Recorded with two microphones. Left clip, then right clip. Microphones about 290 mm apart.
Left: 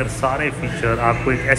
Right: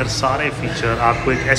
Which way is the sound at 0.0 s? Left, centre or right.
Centre.